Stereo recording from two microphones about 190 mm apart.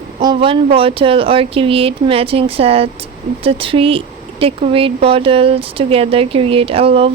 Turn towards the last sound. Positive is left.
turn(degrees=-30)  # may be behind; listen again after turning